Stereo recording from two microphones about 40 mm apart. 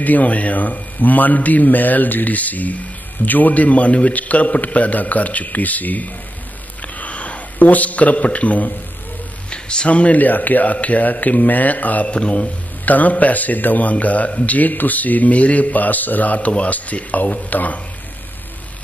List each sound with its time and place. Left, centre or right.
0.0 s a man's voice: left
7.0 s sniff: left
7.5 s speech: left
9.5 s a sound: left
9.8 s a man's voice: left
12.1 s speech: left
12.8 s speech: left